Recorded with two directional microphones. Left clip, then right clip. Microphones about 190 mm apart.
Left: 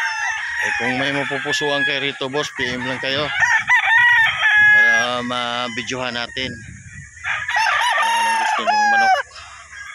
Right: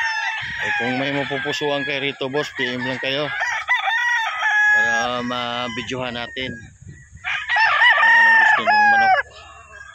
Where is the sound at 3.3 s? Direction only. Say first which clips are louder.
Left 6 dB; 50° right (ahead or behind).